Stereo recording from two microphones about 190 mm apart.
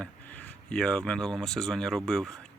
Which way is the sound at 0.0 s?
5° left (ahead or behind).